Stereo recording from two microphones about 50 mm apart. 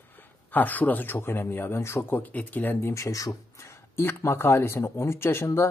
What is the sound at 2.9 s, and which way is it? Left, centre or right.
Speech, left.